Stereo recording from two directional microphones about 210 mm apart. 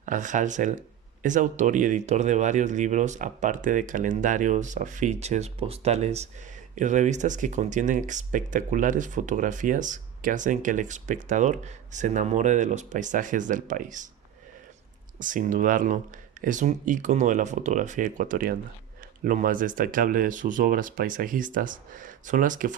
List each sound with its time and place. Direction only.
0.0 s speech: 35° right (ahead or behind)
15.2 s speech: 40° right (ahead or behind)